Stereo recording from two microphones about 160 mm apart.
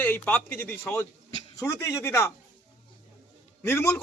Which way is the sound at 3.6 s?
15° left (ahead or behind).